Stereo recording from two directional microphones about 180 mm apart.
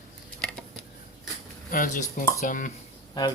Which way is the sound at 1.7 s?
50° left (ahead or behind).